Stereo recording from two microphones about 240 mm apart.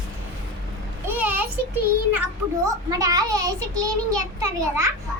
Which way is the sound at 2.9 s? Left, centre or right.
Centre.